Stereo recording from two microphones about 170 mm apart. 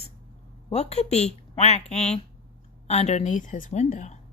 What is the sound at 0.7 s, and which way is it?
A woman's voice, 40° left (ahead or behind).